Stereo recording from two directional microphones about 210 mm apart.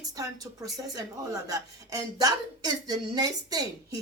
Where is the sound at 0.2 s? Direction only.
15° right (ahead or behind).